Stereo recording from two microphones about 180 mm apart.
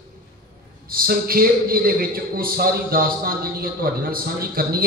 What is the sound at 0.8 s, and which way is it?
A man's voice, 55° right (ahead or behind).